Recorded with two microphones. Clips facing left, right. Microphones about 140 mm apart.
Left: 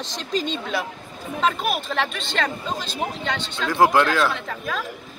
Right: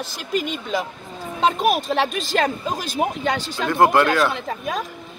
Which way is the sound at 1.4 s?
40° right (ahead or behind).